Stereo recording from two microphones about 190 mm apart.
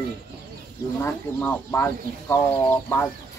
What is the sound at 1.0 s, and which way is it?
Speech, 10° left (ahead or behind).